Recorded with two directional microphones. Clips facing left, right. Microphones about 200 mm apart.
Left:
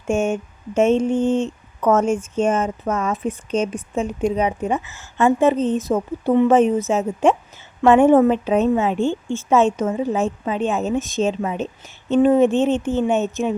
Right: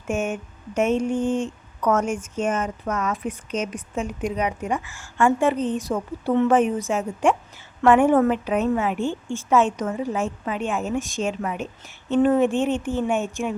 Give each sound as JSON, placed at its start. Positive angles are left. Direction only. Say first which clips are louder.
{"t": 0.1, "sound": "speech", "louder": "left 5 dB", "side_deg": 25}